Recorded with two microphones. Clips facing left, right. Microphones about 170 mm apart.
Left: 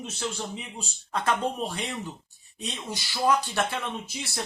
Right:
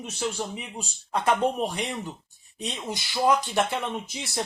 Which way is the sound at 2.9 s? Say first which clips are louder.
Right 2 dB; 15° right (ahead or behind).